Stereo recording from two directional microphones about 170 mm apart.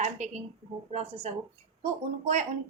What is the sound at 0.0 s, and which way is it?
A woman's voice, 45° right (ahead or behind).